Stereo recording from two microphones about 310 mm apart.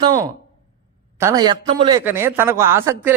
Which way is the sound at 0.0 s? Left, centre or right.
Centre.